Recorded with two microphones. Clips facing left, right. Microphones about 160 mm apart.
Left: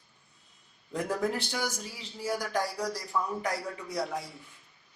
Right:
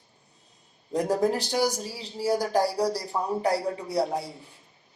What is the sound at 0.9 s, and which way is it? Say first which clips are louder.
A man's voice: right 6 dB; 35° right (ahead or behind).